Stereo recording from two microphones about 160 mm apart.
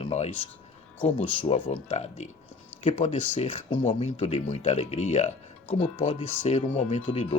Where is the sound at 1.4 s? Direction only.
40° left (ahead or behind).